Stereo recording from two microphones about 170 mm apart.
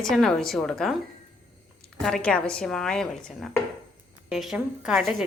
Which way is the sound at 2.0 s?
5° left (ahead or behind).